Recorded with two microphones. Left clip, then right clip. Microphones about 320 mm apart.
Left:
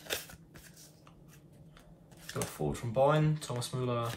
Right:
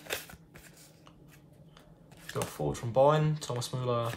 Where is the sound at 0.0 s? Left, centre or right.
Centre.